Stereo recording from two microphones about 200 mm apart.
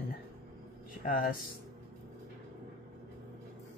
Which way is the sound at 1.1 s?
45° left (ahead or behind).